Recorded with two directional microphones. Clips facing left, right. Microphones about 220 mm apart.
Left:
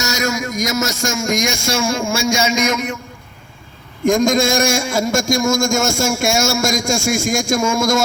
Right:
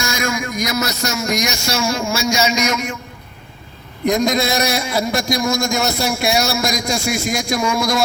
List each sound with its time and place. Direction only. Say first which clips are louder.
0.0 s a man's voice: left 1 dB; 40° left (ahead or behind)
4.0 s a man's voice: left 3 dB; 45° left (ahead or behind)